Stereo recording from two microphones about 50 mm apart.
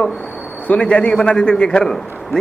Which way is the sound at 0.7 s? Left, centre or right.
Left.